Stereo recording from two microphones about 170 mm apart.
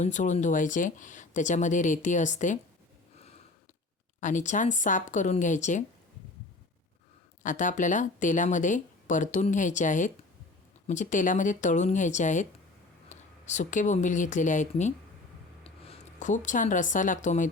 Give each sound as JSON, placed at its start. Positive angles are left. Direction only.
{"t": 0.0, "sound": "speech", "side_deg": 45}
{"t": 4.2, "sound": "speech", "side_deg": 50}
{"t": 7.4, "sound": "speech", "side_deg": 50}
{"t": 15.6, "sound": "speech", "side_deg": 35}